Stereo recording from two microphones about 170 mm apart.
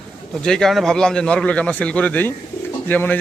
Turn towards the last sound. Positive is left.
turn(degrees=10)  # may be behind; listen again after turning